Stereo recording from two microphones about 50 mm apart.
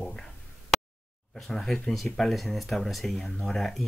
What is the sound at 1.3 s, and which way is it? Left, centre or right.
Speech, centre.